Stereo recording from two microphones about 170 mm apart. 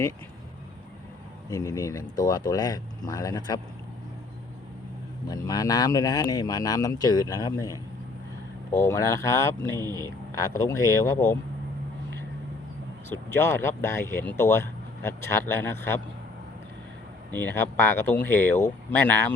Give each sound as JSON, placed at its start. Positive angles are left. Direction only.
{"t": 1.5, "sound": "speech", "side_deg": 20}
{"t": 5.5, "sound": "speech", "side_deg": 20}
{"t": 13.3, "sound": "speech", "side_deg": 15}
{"t": 17.3, "sound": "speech", "side_deg": 15}